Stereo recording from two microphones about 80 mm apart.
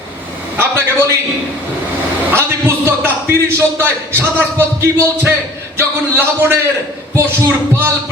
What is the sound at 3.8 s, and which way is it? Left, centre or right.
Speech, right.